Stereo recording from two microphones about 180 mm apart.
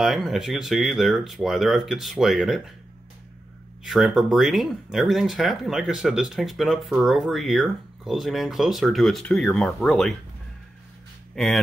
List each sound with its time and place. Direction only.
0.0 s speech: centre (ahead or behind)
3.8 s speech: centre (ahead or behind)
11.3 s speech: centre (ahead or behind)